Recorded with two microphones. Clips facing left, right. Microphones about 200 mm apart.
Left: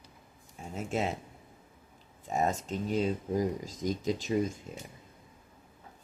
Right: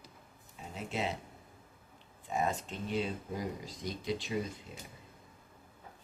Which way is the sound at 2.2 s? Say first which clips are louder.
Left 3 dB; 45° left (ahead or behind).